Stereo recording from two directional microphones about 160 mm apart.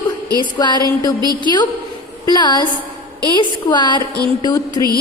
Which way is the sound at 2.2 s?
25° left (ahead or behind).